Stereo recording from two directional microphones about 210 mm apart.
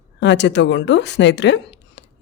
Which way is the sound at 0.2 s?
55° left (ahead or behind).